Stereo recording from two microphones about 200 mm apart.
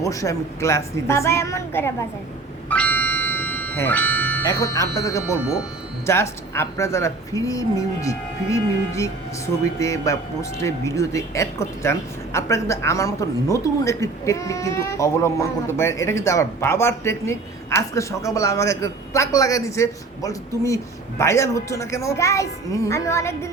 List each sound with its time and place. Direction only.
0.0 s speech: 15° left (ahead or behind)
2.6 s music: 10° left (ahead or behind)
6.1 s speech: 15° left (ahead or behind)